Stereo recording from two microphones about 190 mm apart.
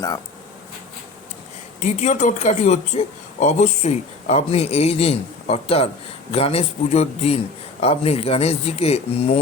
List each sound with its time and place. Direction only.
1.8 s speech: 40° left (ahead or behind)